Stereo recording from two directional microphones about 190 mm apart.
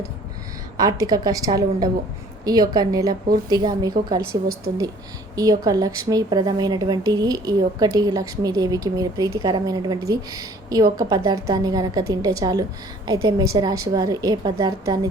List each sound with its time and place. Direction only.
0.8 s a woman's voice: 20° right (ahead or behind)
4.2 s a woman's voice: 55° right (ahead or behind)
5.4 s a woman's voice: 20° right (ahead or behind)